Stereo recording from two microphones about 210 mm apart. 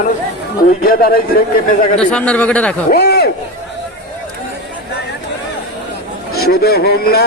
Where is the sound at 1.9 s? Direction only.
5° left (ahead or behind).